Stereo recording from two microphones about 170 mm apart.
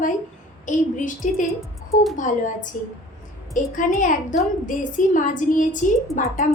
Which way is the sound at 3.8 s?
50° left (ahead or behind).